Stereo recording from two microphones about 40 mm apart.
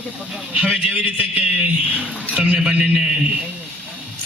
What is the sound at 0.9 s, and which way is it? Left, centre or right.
A man's voice, right.